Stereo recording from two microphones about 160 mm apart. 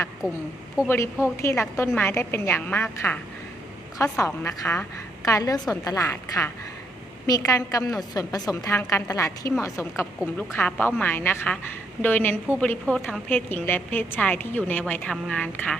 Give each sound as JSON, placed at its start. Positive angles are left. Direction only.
{"t": 0.2, "sound": "a woman's voice", "side_deg": -10}
{"t": 0.9, "sound": "a woman's voice", "side_deg": 15}